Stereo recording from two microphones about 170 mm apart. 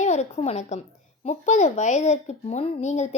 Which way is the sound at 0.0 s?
40° left (ahead or behind).